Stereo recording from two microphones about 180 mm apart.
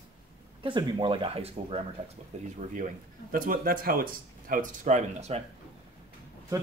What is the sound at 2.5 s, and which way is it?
Speech, 45° right (ahead or behind).